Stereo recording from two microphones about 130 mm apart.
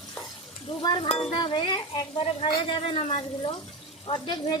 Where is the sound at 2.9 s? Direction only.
45° left (ahead or behind).